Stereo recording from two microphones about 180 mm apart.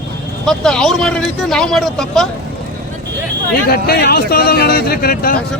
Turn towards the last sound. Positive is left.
turn(degrees=55)  # may be behind; listen again after turning